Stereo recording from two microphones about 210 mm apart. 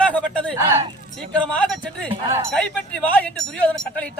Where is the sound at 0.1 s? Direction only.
5° left (ahead or behind).